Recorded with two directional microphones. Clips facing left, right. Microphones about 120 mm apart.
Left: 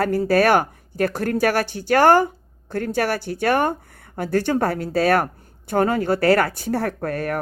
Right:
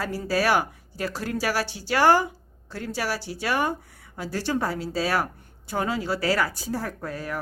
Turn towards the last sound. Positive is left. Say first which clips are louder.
# left 7 dB
turn(degrees=60)  # may be behind; listen again after turning